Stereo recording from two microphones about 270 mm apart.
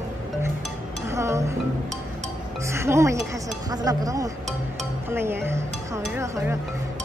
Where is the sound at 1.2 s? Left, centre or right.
Centre.